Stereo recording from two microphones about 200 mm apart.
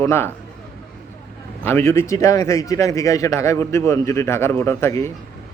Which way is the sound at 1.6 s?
10° left (ahead or behind).